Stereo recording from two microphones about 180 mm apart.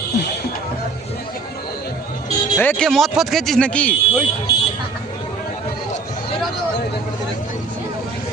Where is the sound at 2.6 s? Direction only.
5° left (ahead or behind).